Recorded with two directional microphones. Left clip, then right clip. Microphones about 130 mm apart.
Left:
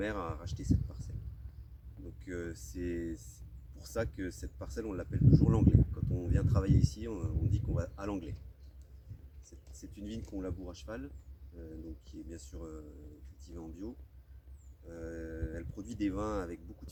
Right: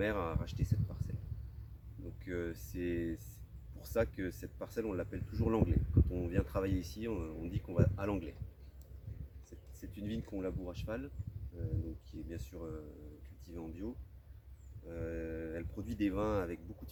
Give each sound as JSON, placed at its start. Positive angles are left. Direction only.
{"t": 0.0, "sound": "speech", "side_deg": -15}
{"t": 2.2, "sound": "speech", "side_deg": -15}
{"t": 9.5, "sound": "a sound", "side_deg": -15}
{"t": 10.3, "sound": "speech", "side_deg": -20}
{"t": 12.3, "sound": "speech", "side_deg": -15}